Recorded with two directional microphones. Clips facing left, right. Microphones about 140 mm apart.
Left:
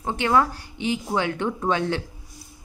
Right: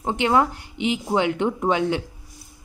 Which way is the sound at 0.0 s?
20° right (ahead or behind).